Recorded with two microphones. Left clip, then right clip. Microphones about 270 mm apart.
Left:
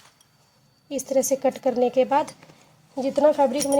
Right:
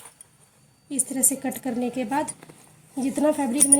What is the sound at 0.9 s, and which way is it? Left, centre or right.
Speech, left.